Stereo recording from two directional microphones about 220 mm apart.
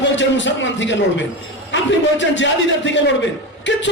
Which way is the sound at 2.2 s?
55° left (ahead or behind).